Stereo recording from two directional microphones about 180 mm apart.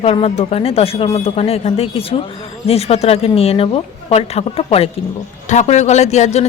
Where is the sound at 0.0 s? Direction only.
35° left (ahead or behind).